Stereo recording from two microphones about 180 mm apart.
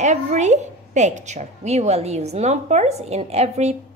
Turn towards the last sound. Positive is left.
turn(degrees=-35)  # may be behind; listen again after turning